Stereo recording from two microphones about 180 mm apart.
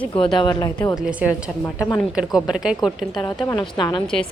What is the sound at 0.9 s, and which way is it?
Speech, 5° right (ahead or behind).